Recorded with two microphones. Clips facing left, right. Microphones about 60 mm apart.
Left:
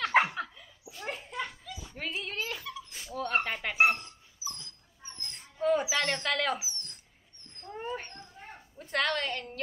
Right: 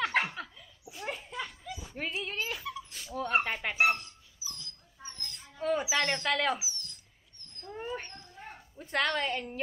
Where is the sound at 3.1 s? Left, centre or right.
Centre.